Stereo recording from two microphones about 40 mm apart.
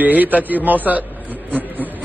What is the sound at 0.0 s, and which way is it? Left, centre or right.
A man's voice, right.